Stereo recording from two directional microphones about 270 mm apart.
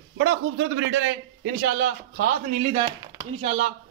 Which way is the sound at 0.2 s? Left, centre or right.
Right.